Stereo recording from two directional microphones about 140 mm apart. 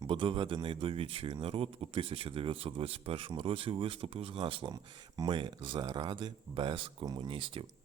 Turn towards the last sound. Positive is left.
turn(degrees=-40)  # may be behind; listen again after turning